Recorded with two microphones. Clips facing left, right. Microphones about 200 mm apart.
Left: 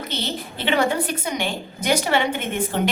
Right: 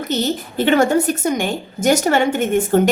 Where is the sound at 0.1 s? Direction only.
45° right (ahead or behind).